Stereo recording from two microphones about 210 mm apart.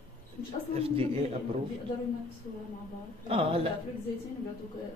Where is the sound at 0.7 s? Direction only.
25° right (ahead or behind).